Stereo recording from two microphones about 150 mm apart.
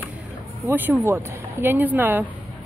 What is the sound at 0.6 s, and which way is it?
A woman's voice, 15° right (ahead or behind).